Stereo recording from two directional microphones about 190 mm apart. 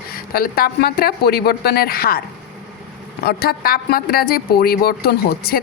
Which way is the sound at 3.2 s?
55° left (ahead or behind).